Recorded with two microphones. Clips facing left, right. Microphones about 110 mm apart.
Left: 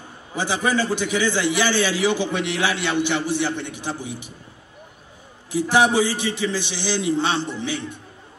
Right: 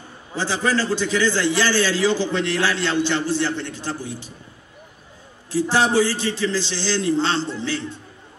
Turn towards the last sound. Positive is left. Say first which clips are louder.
# right 1 dB
turn(degrees=15)  # may be behind; listen again after turning